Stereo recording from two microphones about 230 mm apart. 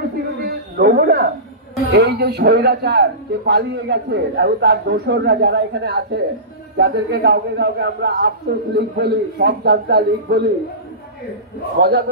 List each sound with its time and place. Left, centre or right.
0.4 s a sound: right
1.9 s a man's voice: right
11.8 s a man's voice: right